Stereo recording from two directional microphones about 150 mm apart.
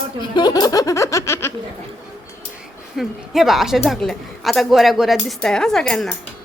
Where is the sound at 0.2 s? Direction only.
30° left (ahead or behind).